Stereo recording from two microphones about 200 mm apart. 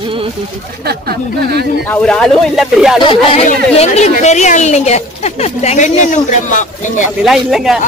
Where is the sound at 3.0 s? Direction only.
25° left (ahead or behind).